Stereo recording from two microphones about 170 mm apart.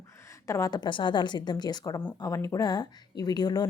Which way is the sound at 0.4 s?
20° left (ahead or behind).